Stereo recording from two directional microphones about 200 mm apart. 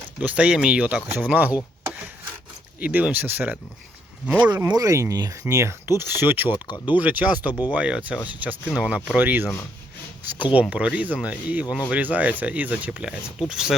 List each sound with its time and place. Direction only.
0.2 s speech: 5° right (ahead or behind)
2.8 s speech: 10° right (ahead or behind)
4.5 s speech: 20° right (ahead or behind)
6.5 s speech: 20° left (ahead or behind)
6.9 s speech: 10° right (ahead or behind)
10.5 s speech: 5° right (ahead or behind)